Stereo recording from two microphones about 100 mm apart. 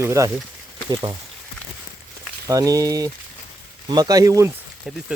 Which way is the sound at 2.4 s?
35° right (ahead or behind).